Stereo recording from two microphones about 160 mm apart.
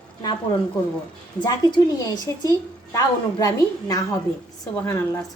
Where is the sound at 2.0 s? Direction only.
25° left (ahead or behind).